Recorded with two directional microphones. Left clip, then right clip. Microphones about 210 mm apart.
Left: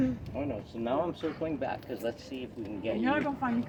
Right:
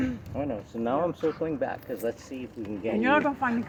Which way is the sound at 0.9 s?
50° right (ahead or behind).